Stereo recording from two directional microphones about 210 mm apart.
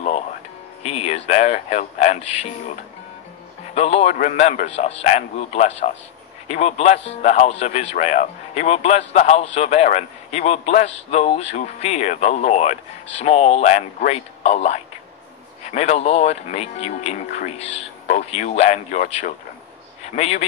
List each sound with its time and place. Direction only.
0.8 s speech: 30° left (ahead or behind)